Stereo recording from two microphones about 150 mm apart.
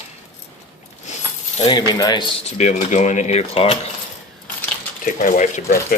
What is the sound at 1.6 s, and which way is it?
Speech, 30° left (ahead or behind).